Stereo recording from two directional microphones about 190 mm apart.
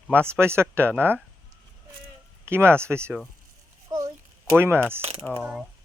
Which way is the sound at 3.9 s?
20° right (ahead or behind).